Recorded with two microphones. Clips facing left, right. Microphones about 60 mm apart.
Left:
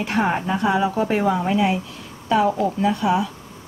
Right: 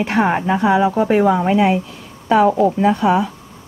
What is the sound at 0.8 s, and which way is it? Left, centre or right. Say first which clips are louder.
Speech: right 6 dB; centre.